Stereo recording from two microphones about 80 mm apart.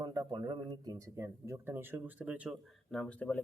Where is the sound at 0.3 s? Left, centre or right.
Right.